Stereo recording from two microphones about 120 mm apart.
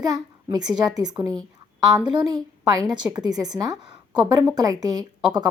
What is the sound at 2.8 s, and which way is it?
A woman's voice, 30° right (ahead or behind).